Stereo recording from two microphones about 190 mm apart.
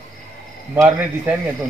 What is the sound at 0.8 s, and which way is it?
Speech, 10° right (ahead or behind).